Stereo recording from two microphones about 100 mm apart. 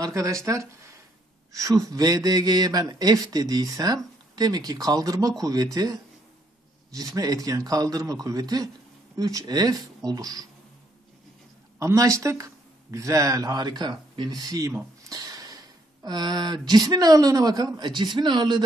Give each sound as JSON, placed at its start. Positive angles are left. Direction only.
{"t": 0.0, "sound": "speech", "side_deg": -30}
{"t": 11.8, "sound": "speech", "side_deg": -35}